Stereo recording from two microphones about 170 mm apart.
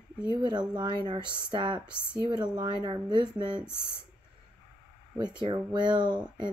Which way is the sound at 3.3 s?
5° right (ahead or behind).